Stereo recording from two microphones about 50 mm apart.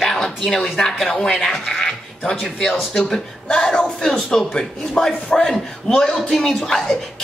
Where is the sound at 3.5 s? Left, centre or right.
Centre.